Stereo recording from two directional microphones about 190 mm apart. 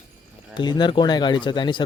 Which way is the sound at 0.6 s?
25° left (ahead or behind).